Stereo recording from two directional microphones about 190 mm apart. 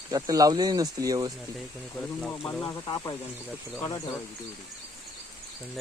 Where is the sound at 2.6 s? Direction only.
20° left (ahead or behind).